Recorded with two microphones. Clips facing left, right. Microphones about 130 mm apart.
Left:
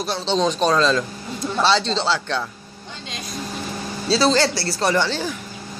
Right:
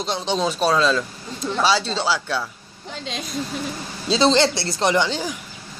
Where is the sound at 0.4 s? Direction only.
10° right (ahead or behind).